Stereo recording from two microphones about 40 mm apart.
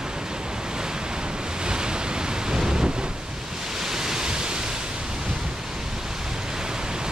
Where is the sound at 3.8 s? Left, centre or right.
Centre.